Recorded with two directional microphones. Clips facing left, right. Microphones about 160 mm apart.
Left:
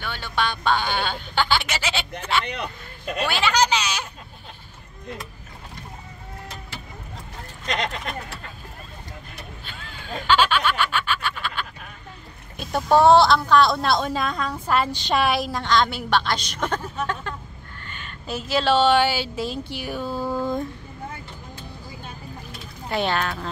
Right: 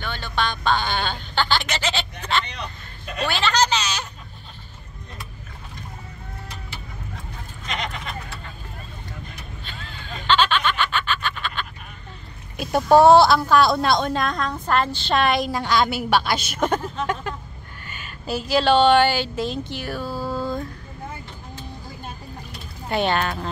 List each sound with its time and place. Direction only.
0.0 s music: 10° left (ahead or behind)
3.2 s a sound: 10° left (ahead or behind)
9.7 s snicker: 10° left (ahead or behind)
12.5 s a woman's voice: 5° right (ahead or behind)
17.0 s a sound: 15° right (ahead or behind)
17.8 s a woman's voice: 5° right (ahead or behind); by 20.6 s 15° left (ahead or behind)
22.8 s a woman's voice: centre (ahead or behind)